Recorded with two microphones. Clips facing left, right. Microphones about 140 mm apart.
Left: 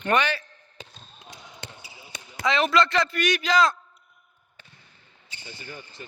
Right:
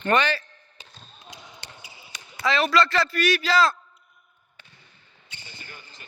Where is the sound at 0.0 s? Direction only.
10° left (ahead or behind).